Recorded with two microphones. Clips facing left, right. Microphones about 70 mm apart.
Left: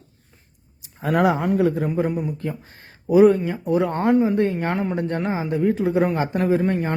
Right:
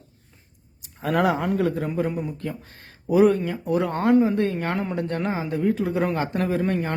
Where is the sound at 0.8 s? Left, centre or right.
Centre.